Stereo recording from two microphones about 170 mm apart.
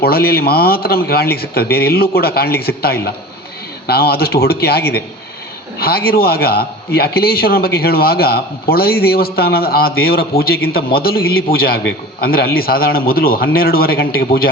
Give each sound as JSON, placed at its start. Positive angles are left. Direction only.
{"t": 0.0, "sound": "a man's voice", "side_deg": 65}